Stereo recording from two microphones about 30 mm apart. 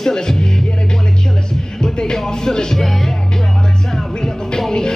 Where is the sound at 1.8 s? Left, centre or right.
Left.